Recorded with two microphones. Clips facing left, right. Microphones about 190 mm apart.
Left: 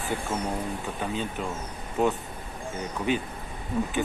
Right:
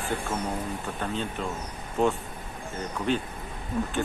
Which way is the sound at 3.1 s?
5° left (ahead or behind).